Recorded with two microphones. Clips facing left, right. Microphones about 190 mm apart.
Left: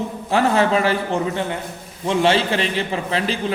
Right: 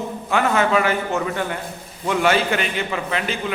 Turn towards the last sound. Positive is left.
turn(degrees=30)  # may be behind; listen again after turning